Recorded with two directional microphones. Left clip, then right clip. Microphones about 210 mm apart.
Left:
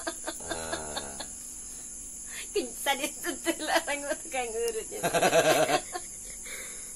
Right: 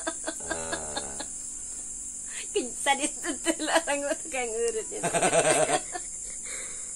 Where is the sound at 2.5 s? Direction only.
40° right (ahead or behind).